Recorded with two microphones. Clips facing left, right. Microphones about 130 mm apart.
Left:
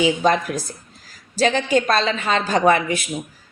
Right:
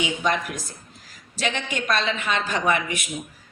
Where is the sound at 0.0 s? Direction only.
35° left (ahead or behind).